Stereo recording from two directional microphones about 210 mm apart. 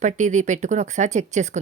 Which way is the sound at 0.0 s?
35° right (ahead or behind).